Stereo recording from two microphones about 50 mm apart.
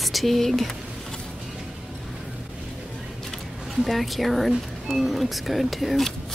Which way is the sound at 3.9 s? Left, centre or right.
Centre.